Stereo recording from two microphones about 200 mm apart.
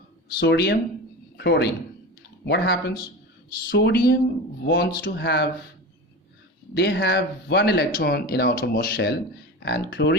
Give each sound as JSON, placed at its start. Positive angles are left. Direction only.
{"t": 0.3, "sound": "speech", "side_deg": 55}
{"t": 6.7, "sound": "speech", "side_deg": 55}